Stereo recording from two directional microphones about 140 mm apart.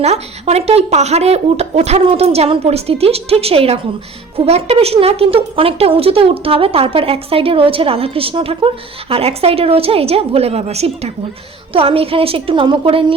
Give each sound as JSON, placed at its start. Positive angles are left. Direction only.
{"t": 0.0, "sound": "a woman's voice", "side_deg": -50}